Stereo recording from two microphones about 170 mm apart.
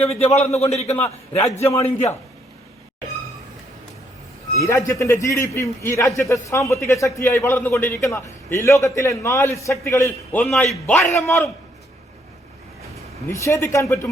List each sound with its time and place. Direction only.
0.0 s a man's voice: 35° left (ahead or behind)
4.6 s a man's voice: 15° left (ahead or behind)
13.2 s a man's voice: 15° left (ahead or behind)